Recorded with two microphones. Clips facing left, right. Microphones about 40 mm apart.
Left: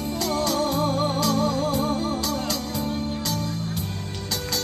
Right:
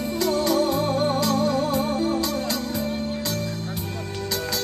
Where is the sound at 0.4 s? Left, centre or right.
Right.